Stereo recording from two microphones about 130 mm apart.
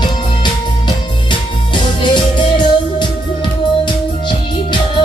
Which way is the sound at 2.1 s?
35° left (ahead or behind).